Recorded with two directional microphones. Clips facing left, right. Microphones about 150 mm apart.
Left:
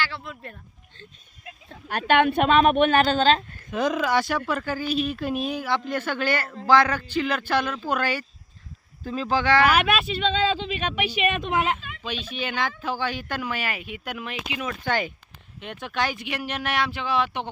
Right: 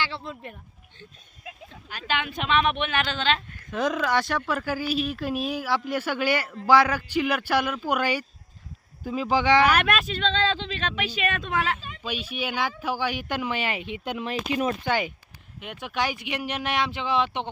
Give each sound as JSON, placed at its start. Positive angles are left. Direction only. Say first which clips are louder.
{"t": 0.0, "sound": "a sound", "louder": "even", "side_deg": -25}
{"t": 1.9, "sound": "speech", "louder": "left 10 dB", "side_deg": 60}
{"t": 3.7, "sound": "speech", "louder": "left 1 dB", "side_deg": 0}
{"t": 9.6, "sound": "speech", "louder": "left 1 dB", "side_deg": 5}
{"t": 12.0, "sound": "speech", "louder": "even", "side_deg": -10}
{"t": 14.3, "sound": "speech", "louder": "right 9 dB", "side_deg": -40}
{"t": 14.8, "sound": "speech", "louder": "even", "side_deg": -10}